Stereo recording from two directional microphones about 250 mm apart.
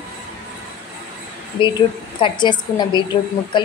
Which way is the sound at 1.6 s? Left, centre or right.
Centre.